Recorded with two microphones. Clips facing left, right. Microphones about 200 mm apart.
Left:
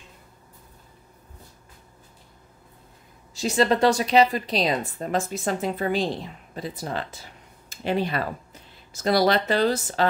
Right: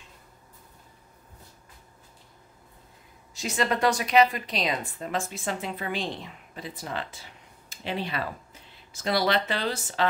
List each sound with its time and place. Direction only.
3.3 s a woman's voice: 30° left (ahead or behind)